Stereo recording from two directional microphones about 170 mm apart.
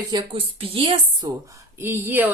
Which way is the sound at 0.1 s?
30° right (ahead or behind).